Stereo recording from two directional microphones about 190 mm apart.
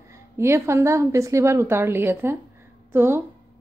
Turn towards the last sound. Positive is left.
turn(degrees=-10)  # may be behind; listen again after turning